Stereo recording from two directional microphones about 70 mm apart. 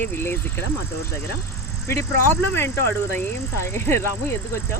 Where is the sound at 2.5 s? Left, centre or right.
Left.